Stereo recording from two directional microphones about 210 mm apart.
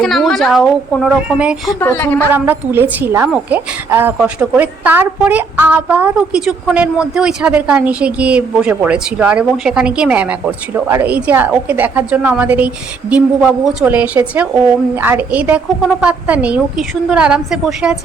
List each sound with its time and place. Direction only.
0.0 s a woman's voice: centre (ahead or behind)
1.8 s a woman's voice: 10° left (ahead or behind)
2.3 s a woman's voice: 10° right (ahead or behind)